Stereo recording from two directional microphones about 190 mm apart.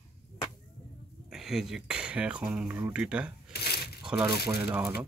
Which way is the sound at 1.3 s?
Centre (ahead or behind).